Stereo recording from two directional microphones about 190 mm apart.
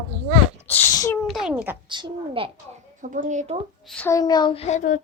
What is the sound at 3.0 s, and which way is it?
Speech, 45° right (ahead or behind).